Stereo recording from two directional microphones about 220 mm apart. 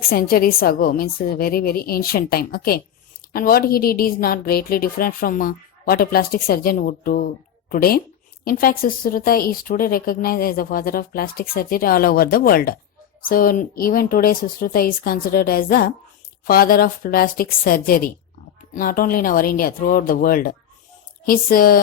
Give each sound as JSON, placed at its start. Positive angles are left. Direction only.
{"t": 0.0, "sound": "a woman's voice", "side_deg": 40}